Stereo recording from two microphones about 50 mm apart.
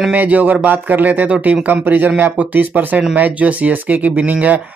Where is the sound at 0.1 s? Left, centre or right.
Right.